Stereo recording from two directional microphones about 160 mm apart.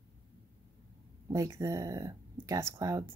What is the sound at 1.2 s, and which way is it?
Speech, 20° right (ahead or behind).